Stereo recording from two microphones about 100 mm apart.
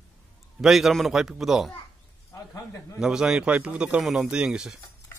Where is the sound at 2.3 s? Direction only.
30° left (ahead or behind).